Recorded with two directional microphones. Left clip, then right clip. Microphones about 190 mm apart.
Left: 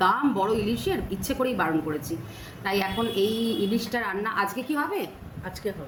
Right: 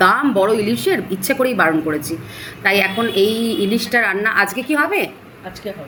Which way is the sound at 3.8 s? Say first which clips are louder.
Right 12 dB; 25° right (ahead or behind).